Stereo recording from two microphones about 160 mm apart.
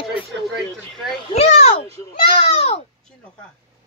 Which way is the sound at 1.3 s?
40° left (ahead or behind).